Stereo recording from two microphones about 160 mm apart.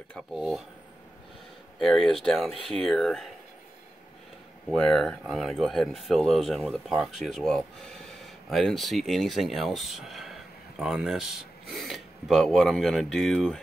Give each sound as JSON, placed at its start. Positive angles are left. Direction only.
{"t": 0.1, "sound": "speech", "side_deg": 0}
{"t": 1.8, "sound": "speech", "side_deg": 0}
{"t": 4.6, "sound": "speech", "side_deg": 0}